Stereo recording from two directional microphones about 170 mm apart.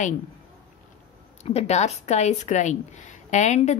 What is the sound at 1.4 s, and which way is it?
A woman's voice, 40° left (ahead or behind).